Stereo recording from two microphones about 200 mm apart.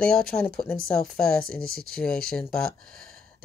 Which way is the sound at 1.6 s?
45° right (ahead or behind).